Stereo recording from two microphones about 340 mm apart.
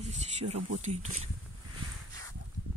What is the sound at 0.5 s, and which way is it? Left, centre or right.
Speech, right.